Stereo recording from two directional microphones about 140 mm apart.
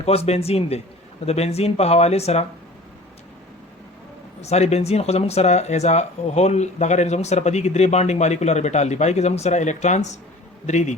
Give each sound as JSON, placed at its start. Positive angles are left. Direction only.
{"t": 0.0, "sound": "speech", "side_deg": 45}
{"t": 4.4, "sound": "a man's voice", "side_deg": 50}